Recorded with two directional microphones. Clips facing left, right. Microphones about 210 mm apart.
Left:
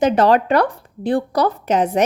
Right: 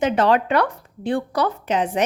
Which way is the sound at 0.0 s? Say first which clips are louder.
Left 4 dB; 40° left (ahead or behind).